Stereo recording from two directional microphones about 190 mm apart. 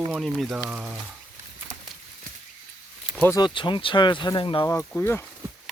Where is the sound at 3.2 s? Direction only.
20° left (ahead or behind).